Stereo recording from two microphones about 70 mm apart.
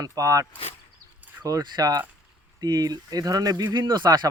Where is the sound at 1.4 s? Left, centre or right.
Right.